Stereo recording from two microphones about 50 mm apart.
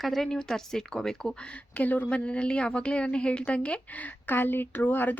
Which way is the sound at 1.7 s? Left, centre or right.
Left.